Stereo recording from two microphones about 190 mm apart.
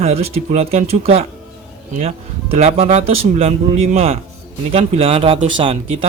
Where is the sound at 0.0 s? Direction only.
35° right (ahead or behind).